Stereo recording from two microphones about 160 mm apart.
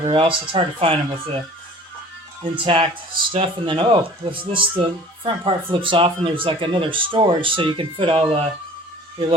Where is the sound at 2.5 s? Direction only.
30° right (ahead or behind).